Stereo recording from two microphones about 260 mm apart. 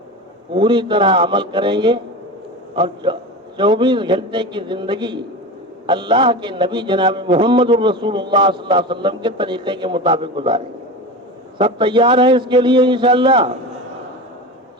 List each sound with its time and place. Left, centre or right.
0.5 s a man's voice: centre